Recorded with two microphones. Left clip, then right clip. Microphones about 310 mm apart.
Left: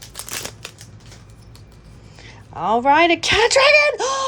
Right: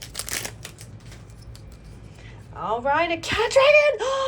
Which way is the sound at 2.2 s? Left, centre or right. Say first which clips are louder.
Left 7 dB; centre.